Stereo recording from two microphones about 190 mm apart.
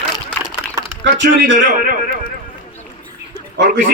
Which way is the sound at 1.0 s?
70° right (ahead or behind).